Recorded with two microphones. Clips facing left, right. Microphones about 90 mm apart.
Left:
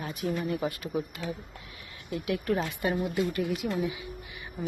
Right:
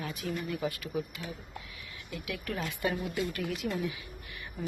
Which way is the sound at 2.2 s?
40° left (ahead or behind).